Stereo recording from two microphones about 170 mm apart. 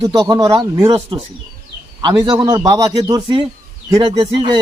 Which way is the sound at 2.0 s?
25° right (ahead or behind).